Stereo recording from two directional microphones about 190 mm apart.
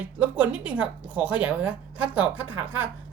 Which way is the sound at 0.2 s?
10° right (ahead or behind).